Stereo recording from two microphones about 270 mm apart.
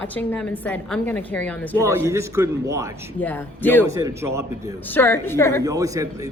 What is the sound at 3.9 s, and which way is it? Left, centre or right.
Speech, centre.